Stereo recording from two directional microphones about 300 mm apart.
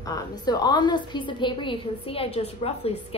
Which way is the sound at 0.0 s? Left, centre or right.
Centre.